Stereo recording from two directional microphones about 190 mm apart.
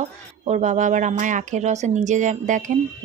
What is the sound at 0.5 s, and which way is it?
A woman's voice, 40° right (ahead or behind).